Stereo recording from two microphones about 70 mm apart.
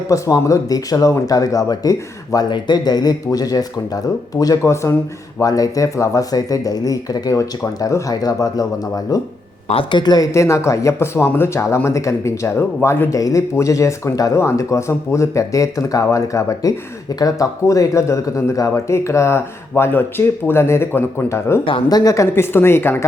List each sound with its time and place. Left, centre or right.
0.1 s speech: left
3.3 s speech: left
4.6 s speech: left
5.4 s speech: left
8.1 s speech: left
10.0 s speech: left
10.3 s speech: left
12.5 s speech: left
13.1 s speech: left
17.2 s speech: left
21.8 s speech: left
22.3 s speech: left